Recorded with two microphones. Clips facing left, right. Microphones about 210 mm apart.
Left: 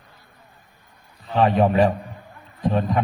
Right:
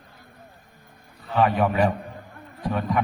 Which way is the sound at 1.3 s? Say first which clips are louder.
Left 3 dB; 25° left (ahead or behind).